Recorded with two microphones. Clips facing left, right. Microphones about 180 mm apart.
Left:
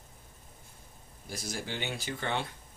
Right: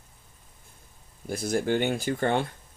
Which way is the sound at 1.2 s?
55° right (ahead or behind).